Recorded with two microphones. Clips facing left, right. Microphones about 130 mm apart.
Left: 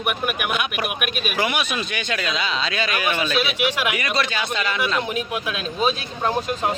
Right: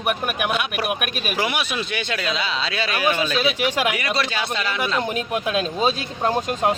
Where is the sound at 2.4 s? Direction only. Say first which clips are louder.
Left 1 dB; 5° right (ahead or behind).